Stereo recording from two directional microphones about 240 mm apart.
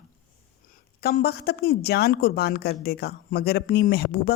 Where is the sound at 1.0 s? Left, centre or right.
Left.